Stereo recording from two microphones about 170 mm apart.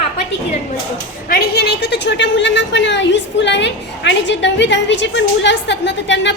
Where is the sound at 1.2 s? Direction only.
65° left (ahead or behind).